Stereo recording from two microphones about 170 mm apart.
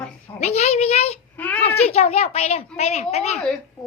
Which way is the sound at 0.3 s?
40° left (ahead or behind).